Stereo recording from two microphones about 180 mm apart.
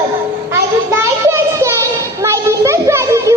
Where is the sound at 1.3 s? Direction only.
15° right (ahead or behind).